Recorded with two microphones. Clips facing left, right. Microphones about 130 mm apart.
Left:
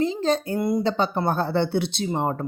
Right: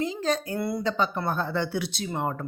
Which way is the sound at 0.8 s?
30° left (ahead or behind).